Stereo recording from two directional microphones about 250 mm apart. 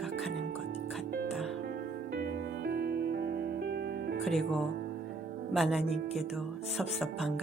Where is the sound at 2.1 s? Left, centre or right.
Right.